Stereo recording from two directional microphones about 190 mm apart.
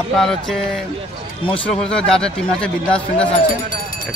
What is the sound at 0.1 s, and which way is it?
Speech, centre (ahead or behind).